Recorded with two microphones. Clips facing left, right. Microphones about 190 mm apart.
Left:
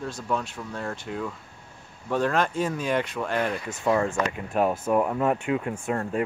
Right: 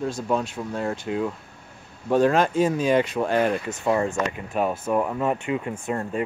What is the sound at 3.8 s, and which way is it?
Speech, 10° right (ahead or behind).